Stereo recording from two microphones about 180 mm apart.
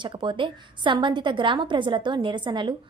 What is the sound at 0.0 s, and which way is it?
A woman's voice, 25° right (ahead or behind).